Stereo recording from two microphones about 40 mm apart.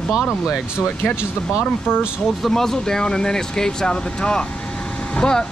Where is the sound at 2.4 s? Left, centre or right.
Centre.